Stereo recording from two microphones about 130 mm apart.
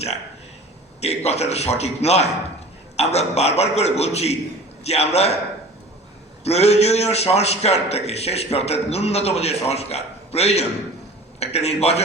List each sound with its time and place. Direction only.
1.0 s a man's voice: 55° left (ahead or behind)
6.4 s a man's voice: 55° left (ahead or behind)